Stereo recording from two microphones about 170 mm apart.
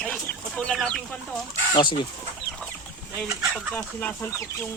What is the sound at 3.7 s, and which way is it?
Speech, 5° left (ahead or behind).